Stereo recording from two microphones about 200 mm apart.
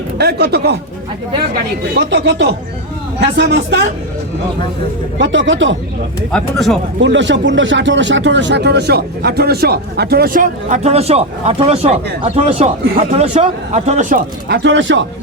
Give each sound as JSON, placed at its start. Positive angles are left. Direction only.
{"t": 0.2, "sound": "speech", "side_deg": -55}
{"t": 2.0, "sound": "speech", "side_deg": -60}
{"t": 5.1, "sound": "speech", "side_deg": -70}
{"t": 6.3, "sound": "speech", "side_deg": 0}
{"t": 7.0, "sound": "speech", "side_deg": -65}
{"t": 14.5, "sound": "speech", "side_deg": -65}